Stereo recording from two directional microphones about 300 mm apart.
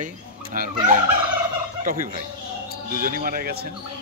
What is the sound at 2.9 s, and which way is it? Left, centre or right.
Speech, right.